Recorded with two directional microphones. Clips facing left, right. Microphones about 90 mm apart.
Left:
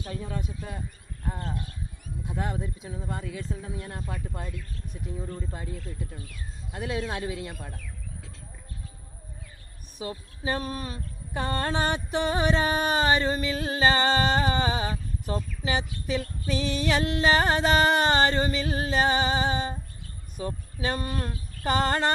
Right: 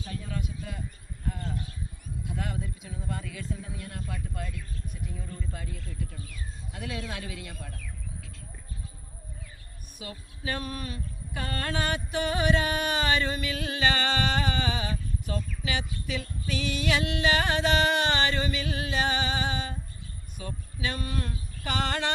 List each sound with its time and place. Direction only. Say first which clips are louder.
0.1 s speech: left 2 dB; 30° left (ahead or behind)
2.2 s speech: left 3 dB; 30° left (ahead or behind)
10.0 s speech: left 6 dB; 30° left (ahead or behind)